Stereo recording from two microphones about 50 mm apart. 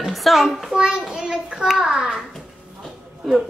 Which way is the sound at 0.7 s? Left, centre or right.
Centre.